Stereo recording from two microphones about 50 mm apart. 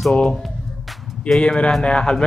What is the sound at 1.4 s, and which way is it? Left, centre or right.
Speech, centre.